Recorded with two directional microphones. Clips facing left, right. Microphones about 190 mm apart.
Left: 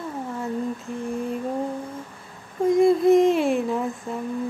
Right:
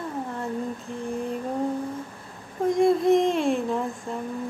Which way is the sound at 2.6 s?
Centre (ahead or behind).